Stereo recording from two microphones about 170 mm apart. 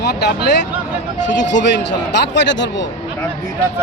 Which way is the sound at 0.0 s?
75° left (ahead or behind).